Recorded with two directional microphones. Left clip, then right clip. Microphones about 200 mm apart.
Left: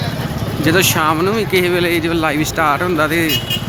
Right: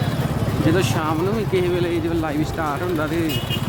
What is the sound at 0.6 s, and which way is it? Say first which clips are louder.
Speech: left 8 dB; 10° left (ahead or behind).